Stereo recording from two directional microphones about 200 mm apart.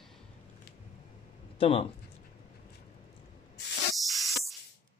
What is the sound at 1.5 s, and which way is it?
Speech, 25° left (ahead or behind).